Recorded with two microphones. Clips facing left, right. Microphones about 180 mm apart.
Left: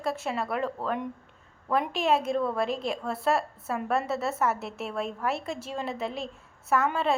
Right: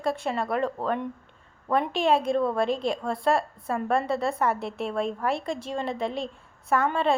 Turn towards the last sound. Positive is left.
turn(degrees=5)  # may be behind; listen again after turning